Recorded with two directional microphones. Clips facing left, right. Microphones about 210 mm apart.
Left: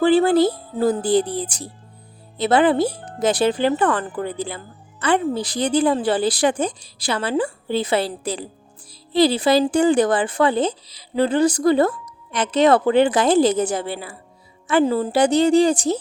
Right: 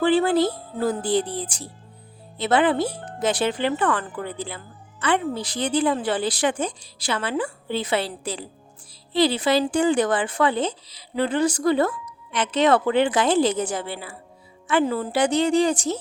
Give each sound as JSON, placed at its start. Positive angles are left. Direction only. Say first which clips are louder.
{"t": 0.0, "sound": "speech", "louder": "left 4 dB", "side_deg": 35}